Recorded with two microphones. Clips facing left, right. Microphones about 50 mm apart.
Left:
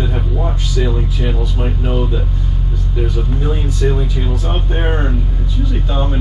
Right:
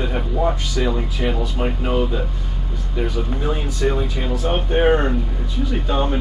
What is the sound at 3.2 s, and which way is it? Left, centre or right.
Speech, centre.